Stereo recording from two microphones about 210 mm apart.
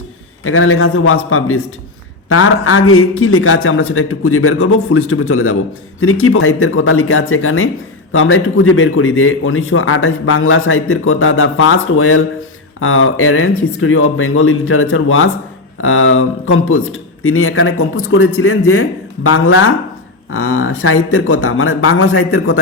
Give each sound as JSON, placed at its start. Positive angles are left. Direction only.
{"t": 0.4, "sound": "a man's voice", "side_deg": 80}